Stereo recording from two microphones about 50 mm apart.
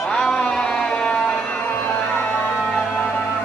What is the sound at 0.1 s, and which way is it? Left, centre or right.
Music, centre.